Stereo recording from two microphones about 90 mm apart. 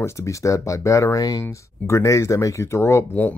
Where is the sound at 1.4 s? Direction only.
30° left (ahead or behind).